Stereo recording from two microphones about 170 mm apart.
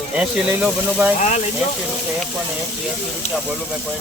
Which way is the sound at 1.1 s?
45° left (ahead or behind).